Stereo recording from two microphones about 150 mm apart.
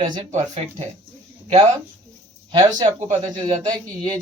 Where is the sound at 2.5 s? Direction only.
30° right (ahead or behind).